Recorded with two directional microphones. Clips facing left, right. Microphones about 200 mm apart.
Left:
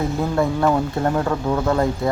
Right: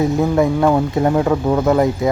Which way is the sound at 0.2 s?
15° right (ahead or behind).